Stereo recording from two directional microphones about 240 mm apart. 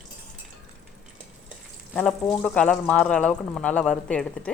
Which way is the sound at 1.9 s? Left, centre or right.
Centre.